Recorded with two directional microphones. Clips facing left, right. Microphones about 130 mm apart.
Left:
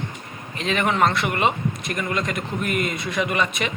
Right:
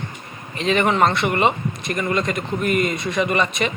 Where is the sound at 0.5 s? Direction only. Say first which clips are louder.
Right 3 dB; centre (ahead or behind).